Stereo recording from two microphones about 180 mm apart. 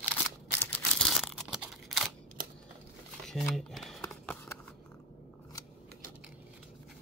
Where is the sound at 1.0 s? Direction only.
Centre (ahead or behind).